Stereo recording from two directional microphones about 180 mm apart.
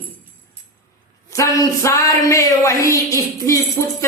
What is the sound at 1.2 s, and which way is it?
Speech, 20° left (ahead or behind).